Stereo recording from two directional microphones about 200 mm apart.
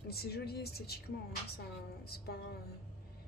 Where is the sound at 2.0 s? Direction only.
50° left (ahead or behind).